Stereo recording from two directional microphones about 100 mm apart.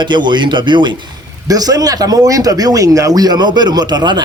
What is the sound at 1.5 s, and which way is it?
A man's voice, 40° right (ahead or behind).